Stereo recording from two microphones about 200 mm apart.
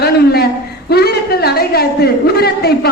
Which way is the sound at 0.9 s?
50° left (ahead or behind).